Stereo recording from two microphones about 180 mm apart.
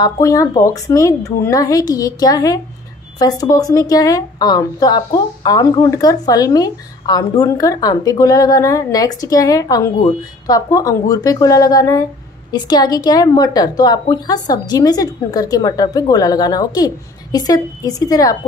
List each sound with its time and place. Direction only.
0.0 s a woman's voice: 20° left (ahead or behind)